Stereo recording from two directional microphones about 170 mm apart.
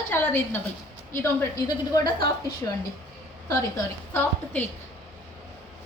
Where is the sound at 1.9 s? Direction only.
25° left (ahead or behind).